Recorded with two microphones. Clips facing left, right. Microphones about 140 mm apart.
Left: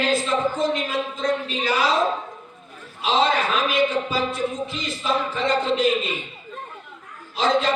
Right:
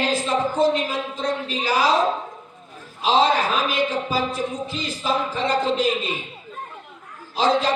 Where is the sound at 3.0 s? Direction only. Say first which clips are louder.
Right 2 dB; 35° right (ahead or behind).